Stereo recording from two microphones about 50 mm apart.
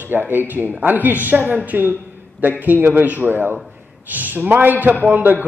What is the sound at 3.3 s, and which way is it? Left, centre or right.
A man's voice, right.